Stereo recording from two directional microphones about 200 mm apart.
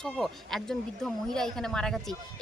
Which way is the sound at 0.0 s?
Centre (ahead or behind).